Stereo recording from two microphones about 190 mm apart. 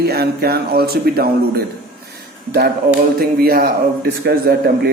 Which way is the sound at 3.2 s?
50° right (ahead or behind).